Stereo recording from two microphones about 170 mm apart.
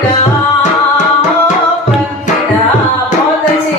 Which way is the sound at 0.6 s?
45° left (ahead or behind).